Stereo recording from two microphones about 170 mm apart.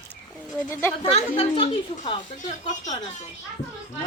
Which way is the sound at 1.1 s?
35° left (ahead or behind).